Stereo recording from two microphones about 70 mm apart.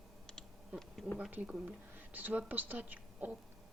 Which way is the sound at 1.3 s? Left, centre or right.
Centre.